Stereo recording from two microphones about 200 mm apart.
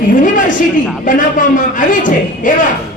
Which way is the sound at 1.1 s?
40° left (ahead or behind).